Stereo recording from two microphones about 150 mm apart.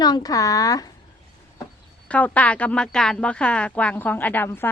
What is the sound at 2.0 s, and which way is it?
Speech, 10° left (ahead or behind).